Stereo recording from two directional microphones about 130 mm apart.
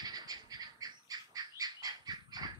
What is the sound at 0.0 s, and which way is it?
Bird, 30° right (ahead or behind).